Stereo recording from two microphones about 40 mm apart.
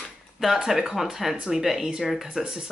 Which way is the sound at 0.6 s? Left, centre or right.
Centre.